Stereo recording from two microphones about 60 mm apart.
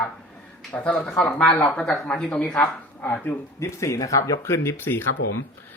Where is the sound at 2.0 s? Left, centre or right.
Left.